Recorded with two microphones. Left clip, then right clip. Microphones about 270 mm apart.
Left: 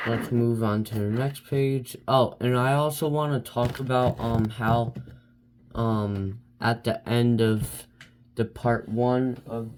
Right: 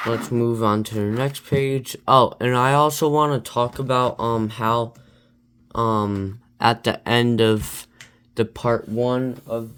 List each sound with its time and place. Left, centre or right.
0.1 s speech: right